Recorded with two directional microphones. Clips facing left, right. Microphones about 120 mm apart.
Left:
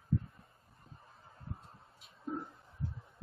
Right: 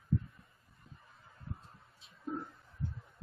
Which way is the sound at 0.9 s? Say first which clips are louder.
Left 3 dB; 30° left (ahead or behind).